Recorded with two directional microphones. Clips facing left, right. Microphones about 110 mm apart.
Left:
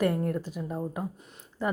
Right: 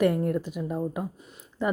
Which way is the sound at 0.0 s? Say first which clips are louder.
Right 3 dB; 15° right (ahead or behind).